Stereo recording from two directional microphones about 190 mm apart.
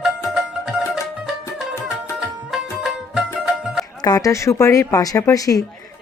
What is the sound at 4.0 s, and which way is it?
A woman's voice, 20° left (ahead or behind).